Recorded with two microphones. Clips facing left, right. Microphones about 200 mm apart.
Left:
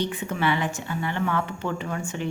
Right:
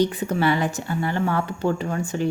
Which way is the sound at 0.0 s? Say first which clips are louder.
Right 5 dB; 40° right (ahead or behind).